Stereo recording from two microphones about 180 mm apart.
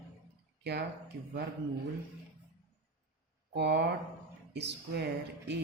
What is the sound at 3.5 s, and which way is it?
Speech, 70° right (ahead or behind).